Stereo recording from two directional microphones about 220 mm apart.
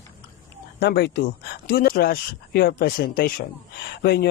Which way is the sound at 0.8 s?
50° left (ahead or behind).